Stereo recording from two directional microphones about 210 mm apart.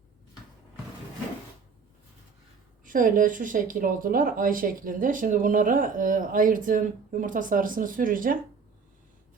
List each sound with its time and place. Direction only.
2.8 s speech: 40° right (ahead or behind)